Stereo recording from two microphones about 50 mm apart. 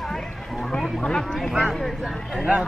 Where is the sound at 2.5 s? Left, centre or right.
Right.